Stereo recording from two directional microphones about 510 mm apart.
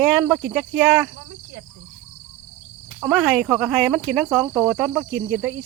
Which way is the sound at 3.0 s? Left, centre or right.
Centre.